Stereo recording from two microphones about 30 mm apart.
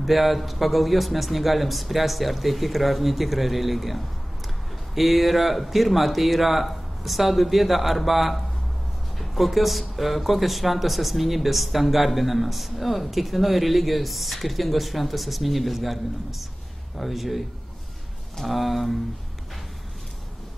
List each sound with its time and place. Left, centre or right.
0.0 s speech: centre
18.5 s speech: centre